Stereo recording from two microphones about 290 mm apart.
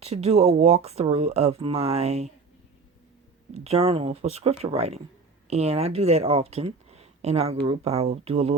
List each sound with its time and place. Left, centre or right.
0.0 s speech: right
3.5 s speech: right